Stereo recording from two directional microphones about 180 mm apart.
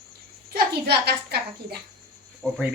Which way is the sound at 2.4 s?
Centre (ahead or behind).